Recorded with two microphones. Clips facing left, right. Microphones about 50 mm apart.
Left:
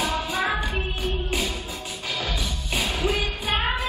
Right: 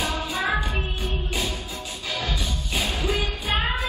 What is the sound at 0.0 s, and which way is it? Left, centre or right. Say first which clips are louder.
Music: left 1 dB; left.